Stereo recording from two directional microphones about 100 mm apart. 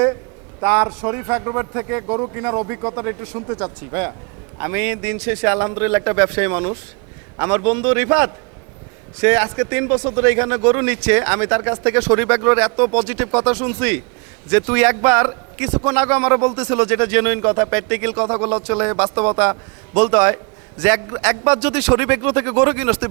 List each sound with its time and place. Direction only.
0.6 s a man's voice: 15° right (ahead or behind)